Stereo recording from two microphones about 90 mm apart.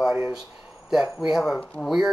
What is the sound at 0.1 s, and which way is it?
Speech, 10° right (ahead or behind).